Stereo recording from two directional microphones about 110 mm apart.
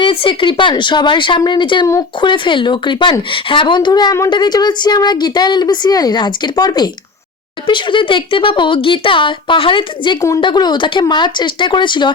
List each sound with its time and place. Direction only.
0.0 s speech: 50° left (ahead or behind)
10.2 s speech: 25° left (ahead or behind)
10.4 s speech: 40° left (ahead or behind)